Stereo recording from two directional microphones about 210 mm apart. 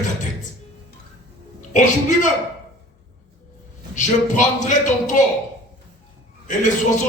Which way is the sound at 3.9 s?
35° left (ahead or behind).